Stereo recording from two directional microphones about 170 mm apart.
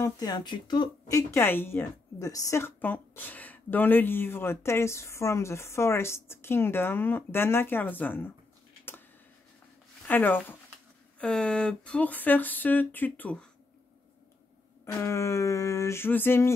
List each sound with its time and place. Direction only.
0.0 s speech: 25° left (ahead or behind)
1.3 s a woman's voice: 15° left (ahead or behind)
10.0 s a woman's voice: 10° left (ahead or behind)
15.0 s a woman's voice: 15° left (ahead or behind)